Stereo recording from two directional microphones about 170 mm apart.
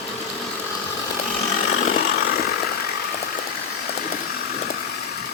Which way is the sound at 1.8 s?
50° left (ahead or behind).